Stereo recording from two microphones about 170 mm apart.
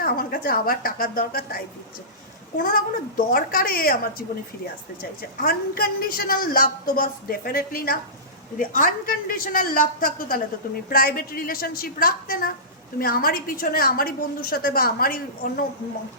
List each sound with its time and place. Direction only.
0.0 s a woman's voice: 60° left (ahead or behind)
5.4 s a woman's voice: 60° left (ahead or behind)